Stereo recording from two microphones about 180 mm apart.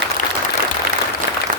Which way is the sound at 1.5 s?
50° right (ahead or behind).